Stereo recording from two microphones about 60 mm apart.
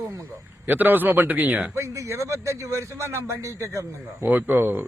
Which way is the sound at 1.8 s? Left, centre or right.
Right.